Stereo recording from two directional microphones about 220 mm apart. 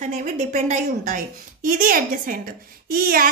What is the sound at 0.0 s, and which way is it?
A woman's voice, 35° right (ahead or behind).